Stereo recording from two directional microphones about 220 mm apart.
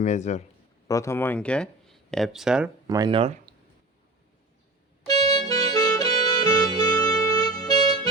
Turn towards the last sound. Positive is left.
turn(degrees=15)  # may be behind; listen again after turning